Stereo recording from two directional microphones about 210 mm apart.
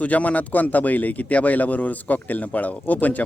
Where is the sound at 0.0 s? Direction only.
5° left (ahead or behind).